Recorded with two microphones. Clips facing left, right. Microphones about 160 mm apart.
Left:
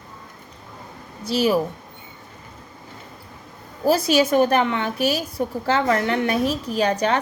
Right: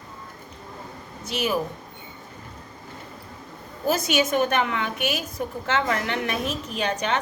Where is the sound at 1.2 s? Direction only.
35° left (ahead or behind).